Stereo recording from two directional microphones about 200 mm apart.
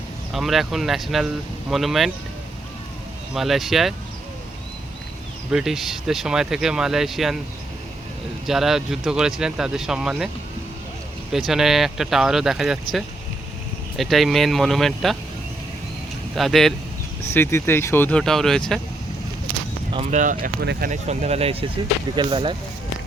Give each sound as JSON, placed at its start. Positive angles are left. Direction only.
{"t": 0.3, "sound": "speech", "side_deg": 0}
{"t": 3.3, "sound": "speech", "side_deg": 0}
{"t": 5.5, "sound": "speech", "side_deg": 0}
{"t": 8.4, "sound": "speech", "side_deg": 0}
{"t": 11.3, "sound": "speech", "side_deg": 0}
{"t": 13.9, "sound": "speech", "side_deg": 0}
{"t": 16.3, "sound": "speech", "side_deg": 0}
{"t": 17.3, "sound": "speech", "side_deg": 10}
{"t": 19.9, "sound": "speech", "side_deg": -30}
{"t": 20.4, "sound": "speech", "side_deg": -50}
{"t": 20.9, "sound": "speech", "side_deg": -35}